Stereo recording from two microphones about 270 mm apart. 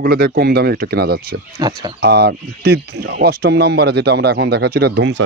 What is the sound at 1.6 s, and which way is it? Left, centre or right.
Speech, centre.